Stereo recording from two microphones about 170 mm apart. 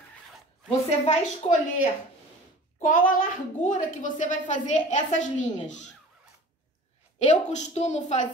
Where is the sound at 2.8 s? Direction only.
55° left (ahead or behind).